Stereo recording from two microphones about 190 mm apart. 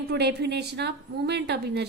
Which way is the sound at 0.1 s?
60° right (ahead or behind).